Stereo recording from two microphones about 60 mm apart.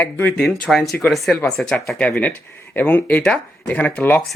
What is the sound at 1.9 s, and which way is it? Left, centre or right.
Speech, left.